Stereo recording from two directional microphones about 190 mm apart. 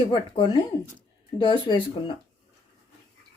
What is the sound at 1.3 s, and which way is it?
Speech, 25° left (ahead or behind).